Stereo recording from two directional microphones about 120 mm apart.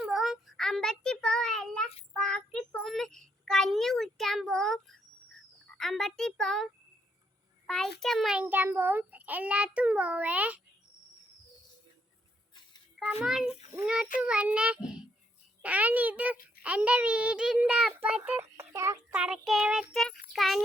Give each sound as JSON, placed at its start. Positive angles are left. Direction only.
{"t": 0.0, "sound": "child singing", "side_deg": -5}
{"t": 5.7, "sound": "music", "side_deg": 5}
{"t": 7.7, "sound": "music", "side_deg": 5}
{"t": 8.4, "sound": "a child's voice", "side_deg": -15}
{"t": 13.0, "sound": "music", "side_deg": -5}
{"t": 13.7, "sound": "a child's voice", "side_deg": -10}
{"t": 18.3, "sound": "speech", "side_deg": -20}
{"t": 19.1, "sound": "music", "side_deg": -5}